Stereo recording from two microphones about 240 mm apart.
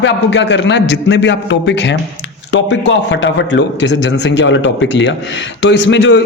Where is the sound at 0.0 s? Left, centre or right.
Left.